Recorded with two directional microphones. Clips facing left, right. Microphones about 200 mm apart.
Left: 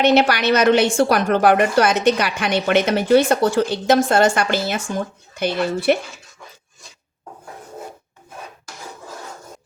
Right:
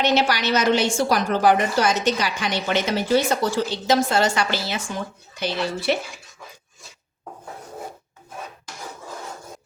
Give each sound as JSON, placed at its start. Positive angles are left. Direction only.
{"t": 0.0, "sound": "a woman's voice", "side_deg": 60}